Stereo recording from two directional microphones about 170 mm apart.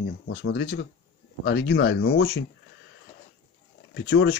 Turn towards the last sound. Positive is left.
turn(degrees=90)